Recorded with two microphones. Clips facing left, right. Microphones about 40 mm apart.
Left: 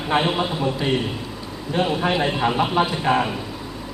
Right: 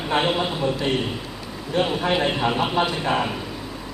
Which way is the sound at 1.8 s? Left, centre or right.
Centre.